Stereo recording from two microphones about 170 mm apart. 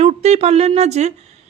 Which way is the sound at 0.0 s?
40° right (ahead or behind).